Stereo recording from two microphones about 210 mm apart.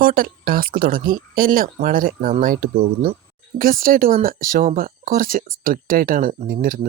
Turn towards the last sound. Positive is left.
turn(degrees=-40)  # may be behind; listen again after turning